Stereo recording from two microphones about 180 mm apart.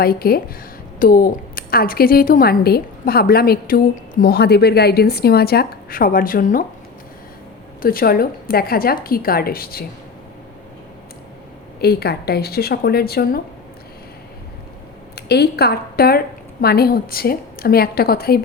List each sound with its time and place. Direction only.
0.0 s a woman's voice: 55° left (ahead or behind)
7.8 s a woman's voice: 55° left (ahead or behind)
11.8 s a woman's voice: 60° left (ahead or behind)
15.1 s a woman's voice: 65° left (ahead or behind)